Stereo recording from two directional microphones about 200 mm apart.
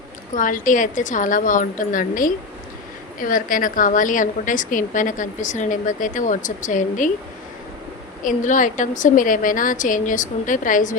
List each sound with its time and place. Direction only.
0.3 s a woman's voice: 40° left (ahead or behind)
8.2 s a woman's voice: 40° left (ahead or behind)